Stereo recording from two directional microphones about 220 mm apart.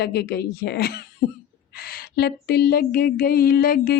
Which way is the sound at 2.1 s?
50° left (ahead or behind).